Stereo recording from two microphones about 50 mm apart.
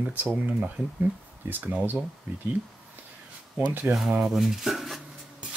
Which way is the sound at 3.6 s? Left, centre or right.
Right.